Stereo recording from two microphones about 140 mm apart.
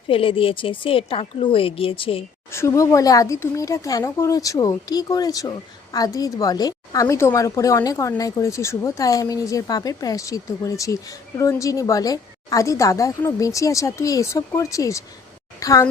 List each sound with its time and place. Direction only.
0.1 s a woman's voice: 40° left (ahead or behind)
2.5 s speech: 20° left (ahead or behind)